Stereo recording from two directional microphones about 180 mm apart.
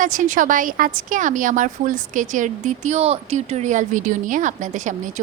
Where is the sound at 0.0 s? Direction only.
45° right (ahead or behind).